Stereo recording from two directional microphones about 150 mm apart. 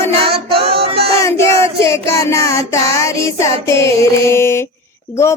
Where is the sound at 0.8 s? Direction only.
40° right (ahead or behind).